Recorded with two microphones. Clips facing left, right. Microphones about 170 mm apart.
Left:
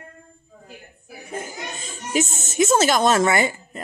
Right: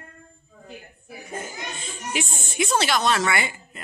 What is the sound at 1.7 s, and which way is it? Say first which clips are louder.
A woman's voice: left 7 dB; 45° left (ahead or behind).